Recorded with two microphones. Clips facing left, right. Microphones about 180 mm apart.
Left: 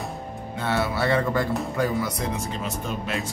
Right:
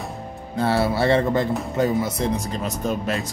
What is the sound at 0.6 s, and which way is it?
Music, 30° right (ahead or behind).